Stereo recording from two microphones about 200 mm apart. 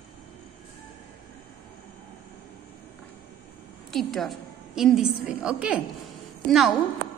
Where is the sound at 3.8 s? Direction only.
Centre (ahead or behind).